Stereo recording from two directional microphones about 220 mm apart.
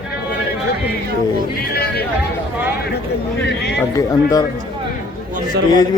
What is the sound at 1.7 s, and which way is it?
Speech, 45° left (ahead or behind).